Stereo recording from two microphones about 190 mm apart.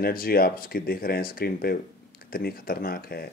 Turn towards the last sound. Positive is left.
turn(degrees=50)  # may be behind; listen again after turning